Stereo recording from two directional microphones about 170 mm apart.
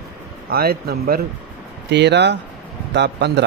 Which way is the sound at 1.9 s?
85° right.